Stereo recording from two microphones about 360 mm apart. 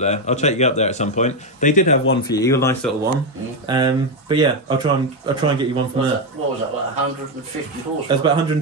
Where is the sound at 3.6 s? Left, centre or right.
Centre.